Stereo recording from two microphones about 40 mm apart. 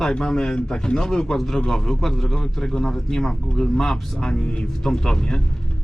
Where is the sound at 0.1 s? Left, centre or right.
Centre.